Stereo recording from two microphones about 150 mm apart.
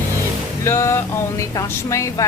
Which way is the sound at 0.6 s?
20° left (ahead or behind).